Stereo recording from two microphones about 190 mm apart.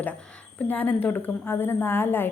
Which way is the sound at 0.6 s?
10° left (ahead or behind).